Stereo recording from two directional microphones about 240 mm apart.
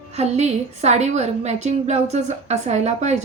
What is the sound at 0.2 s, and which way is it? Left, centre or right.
A woman's voice, right.